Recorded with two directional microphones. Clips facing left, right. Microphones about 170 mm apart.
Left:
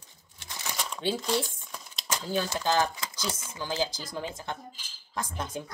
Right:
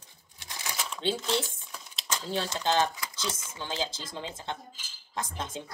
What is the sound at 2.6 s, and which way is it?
Speech, 25° right (ahead or behind).